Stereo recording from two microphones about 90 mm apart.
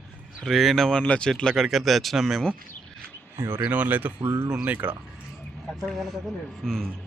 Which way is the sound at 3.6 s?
20° right (ahead or behind).